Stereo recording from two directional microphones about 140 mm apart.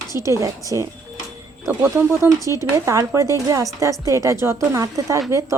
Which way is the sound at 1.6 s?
20° right (ahead or behind).